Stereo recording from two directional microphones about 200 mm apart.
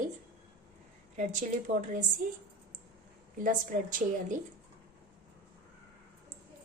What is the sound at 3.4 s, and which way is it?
A woman's voice, 40° right (ahead or behind).